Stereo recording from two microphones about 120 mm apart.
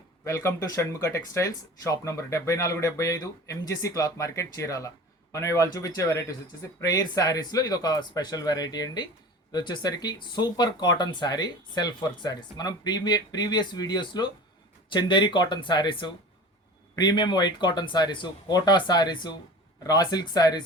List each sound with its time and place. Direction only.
0.3 s speech: 25° left (ahead or behind)